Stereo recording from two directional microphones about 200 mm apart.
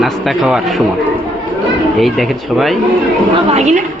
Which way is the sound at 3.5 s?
35° right (ahead or behind).